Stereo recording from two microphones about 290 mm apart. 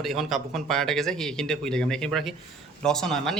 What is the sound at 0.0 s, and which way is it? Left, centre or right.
Speech, centre.